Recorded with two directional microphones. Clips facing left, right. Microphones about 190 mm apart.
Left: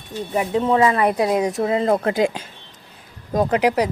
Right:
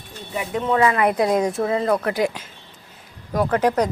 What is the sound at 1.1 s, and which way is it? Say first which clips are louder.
Speech: even; 10° left (ahead or behind).